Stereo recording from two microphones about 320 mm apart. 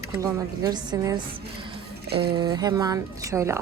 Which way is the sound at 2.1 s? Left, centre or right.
Right.